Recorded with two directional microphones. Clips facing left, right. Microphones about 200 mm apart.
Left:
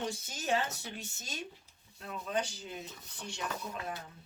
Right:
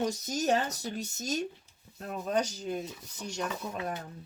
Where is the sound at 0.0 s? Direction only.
40° right (ahead or behind).